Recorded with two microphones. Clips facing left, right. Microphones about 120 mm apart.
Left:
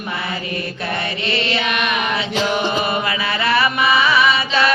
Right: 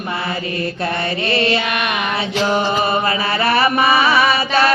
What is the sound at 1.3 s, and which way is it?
Mantra, 40° right (ahead or behind).